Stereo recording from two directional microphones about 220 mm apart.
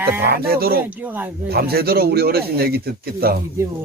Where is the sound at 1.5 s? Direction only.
45° right (ahead or behind).